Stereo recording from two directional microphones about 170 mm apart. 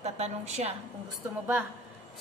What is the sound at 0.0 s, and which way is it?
Speech, 40° right (ahead or behind).